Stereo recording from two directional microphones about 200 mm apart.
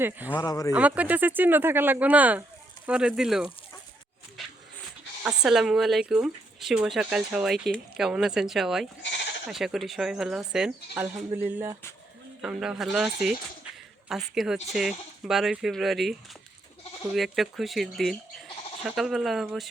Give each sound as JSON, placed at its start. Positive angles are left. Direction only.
{"t": 0.0, "sound": "speech", "side_deg": -10}
{"t": 0.3, "sound": "speech", "side_deg": 20}
{"t": 0.7, "sound": "speech", "side_deg": -5}
{"t": 5.2, "sound": "speech", "side_deg": -5}
{"t": 9.0, "sound": "speech", "side_deg": 65}
{"t": 9.5, "sound": "speech", "side_deg": 0}
{"t": 17.2, "sound": "speech", "side_deg": 0}